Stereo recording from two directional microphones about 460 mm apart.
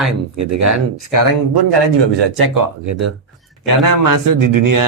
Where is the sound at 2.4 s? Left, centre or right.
Right.